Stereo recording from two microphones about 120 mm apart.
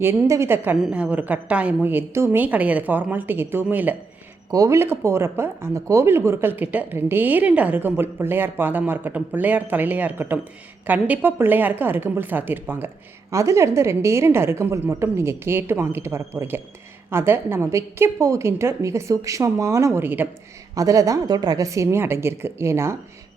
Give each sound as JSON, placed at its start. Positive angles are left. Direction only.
{"t": 0.0, "sound": "speech", "side_deg": -20}
{"t": 4.5, "sound": "a woman's voice", "side_deg": -25}
{"t": 20.7, "sound": "a woman's voice", "side_deg": -30}